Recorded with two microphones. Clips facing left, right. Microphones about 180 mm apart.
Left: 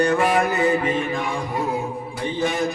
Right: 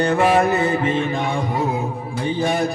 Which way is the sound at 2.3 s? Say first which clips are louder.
Right 2 dB; 35° right (ahead or behind).